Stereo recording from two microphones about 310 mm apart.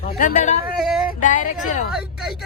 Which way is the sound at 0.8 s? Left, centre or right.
Centre.